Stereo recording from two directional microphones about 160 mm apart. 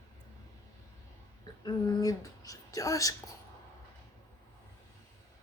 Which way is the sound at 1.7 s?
20° left (ahead or behind).